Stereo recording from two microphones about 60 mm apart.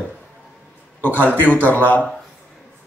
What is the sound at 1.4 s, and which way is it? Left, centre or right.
Speech, left.